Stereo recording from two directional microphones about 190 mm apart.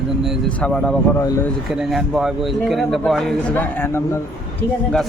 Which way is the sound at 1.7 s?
Centre (ahead or behind).